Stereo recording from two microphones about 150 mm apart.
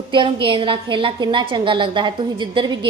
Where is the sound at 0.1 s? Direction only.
35° right (ahead or behind).